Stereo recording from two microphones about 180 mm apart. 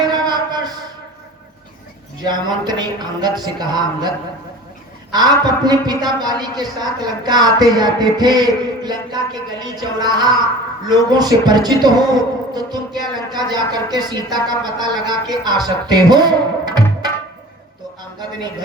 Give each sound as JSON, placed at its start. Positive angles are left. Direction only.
{"t": 0.0, "sound": "a sound", "side_deg": -25}
{"t": 2.2, "sound": "music", "side_deg": -25}
{"t": 5.1, "sound": "music", "side_deg": -20}